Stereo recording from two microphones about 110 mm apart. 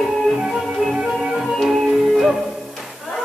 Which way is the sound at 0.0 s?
Centre (ahead or behind).